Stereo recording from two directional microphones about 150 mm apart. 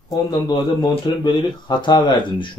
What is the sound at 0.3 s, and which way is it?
Speech, 30° left (ahead or behind).